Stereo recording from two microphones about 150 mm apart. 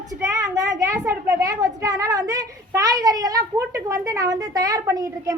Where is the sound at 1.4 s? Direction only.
20° right (ahead or behind).